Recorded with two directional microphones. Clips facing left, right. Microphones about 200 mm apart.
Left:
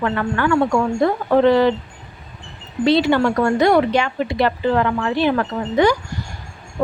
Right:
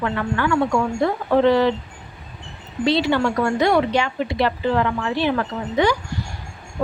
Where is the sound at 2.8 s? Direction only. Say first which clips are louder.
Left 3 dB; 50° left (ahead or behind).